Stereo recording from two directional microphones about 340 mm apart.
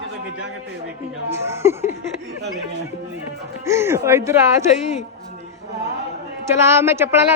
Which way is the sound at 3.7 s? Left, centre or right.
Centre.